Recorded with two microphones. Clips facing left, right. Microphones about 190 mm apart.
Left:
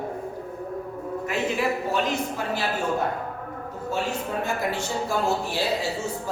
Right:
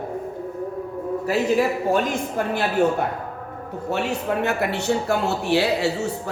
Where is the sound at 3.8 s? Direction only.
70° right (ahead or behind).